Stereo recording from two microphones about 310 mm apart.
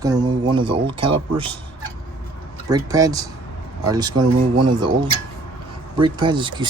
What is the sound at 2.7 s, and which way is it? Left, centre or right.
Speech, centre.